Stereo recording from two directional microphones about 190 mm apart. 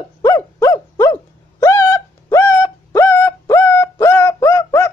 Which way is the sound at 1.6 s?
15° left (ahead or behind).